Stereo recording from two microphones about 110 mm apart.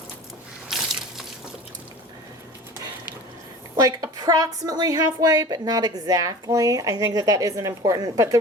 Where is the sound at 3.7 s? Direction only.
35° right (ahead or behind).